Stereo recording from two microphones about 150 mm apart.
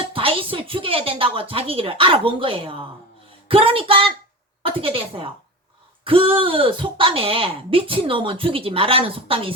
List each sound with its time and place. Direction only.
0.1 s a woman's voice: 35° right (ahead or behind)